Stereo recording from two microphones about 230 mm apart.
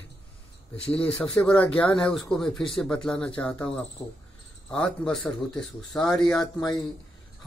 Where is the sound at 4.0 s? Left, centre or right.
Centre.